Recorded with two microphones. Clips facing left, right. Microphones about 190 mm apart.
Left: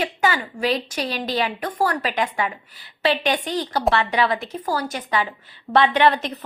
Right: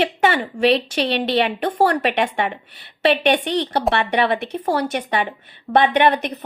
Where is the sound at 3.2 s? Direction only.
70° right (ahead or behind).